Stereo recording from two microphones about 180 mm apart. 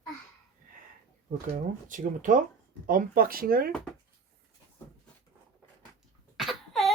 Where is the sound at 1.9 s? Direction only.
45° right (ahead or behind).